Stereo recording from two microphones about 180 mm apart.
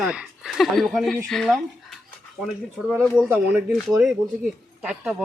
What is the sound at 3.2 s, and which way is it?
Speech, 10° right (ahead or behind).